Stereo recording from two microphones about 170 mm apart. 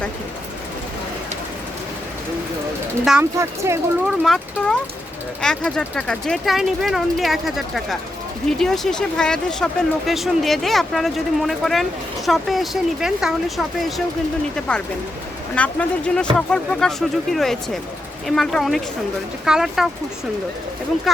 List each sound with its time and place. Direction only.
3.0 s speech: 5° right (ahead or behind)
3.3 s speech: 15° right (ahead or behind)
4.0 s speech: centre (ahead or behind)